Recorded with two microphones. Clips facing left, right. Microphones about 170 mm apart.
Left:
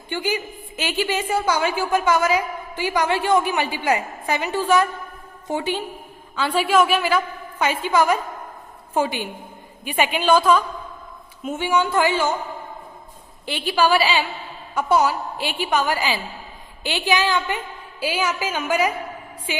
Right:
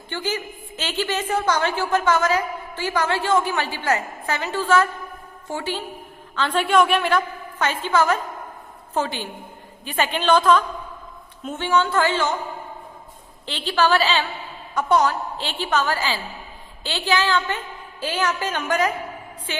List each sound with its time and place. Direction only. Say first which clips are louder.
0.1 s a woman's voice: left 2 dB; 10° left (ahead or behind)
13.4 s a woman's voice: left 1 dB; 10° left (ahead or behind)